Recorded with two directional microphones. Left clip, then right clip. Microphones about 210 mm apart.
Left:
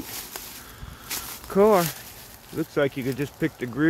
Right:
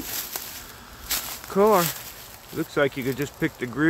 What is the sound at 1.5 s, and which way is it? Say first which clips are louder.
Speech: even; 20° left (ahead or behind).